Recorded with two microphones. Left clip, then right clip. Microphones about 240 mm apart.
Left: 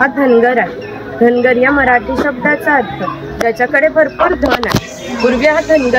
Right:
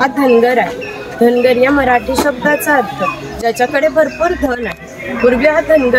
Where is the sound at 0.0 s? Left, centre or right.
Right.